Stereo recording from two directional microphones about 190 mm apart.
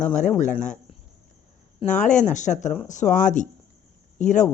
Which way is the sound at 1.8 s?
40° left (ahead or behind).